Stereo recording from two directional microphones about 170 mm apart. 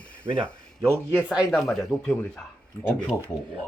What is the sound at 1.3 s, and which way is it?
Speech, centre (ahead or behind).